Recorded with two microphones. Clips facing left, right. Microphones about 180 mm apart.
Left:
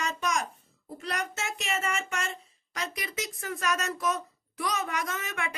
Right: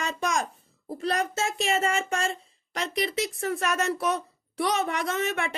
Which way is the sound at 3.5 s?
30° right (ahead or behind).